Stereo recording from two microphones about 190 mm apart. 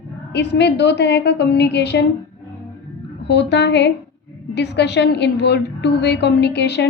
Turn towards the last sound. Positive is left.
turn(degrees=65)  # may be behind; listen again after turning